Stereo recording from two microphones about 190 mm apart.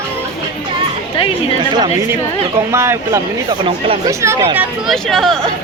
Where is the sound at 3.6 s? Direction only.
25° right (ahead or behind).